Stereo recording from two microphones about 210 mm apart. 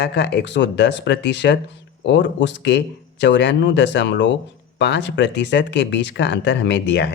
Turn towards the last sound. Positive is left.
turn(degrees=55)  # may be behind; listen again after turning